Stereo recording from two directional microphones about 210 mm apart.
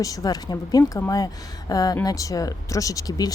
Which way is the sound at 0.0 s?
15° left (ahead or behind).